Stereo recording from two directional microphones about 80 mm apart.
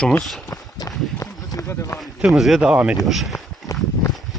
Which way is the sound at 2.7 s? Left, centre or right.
Centre.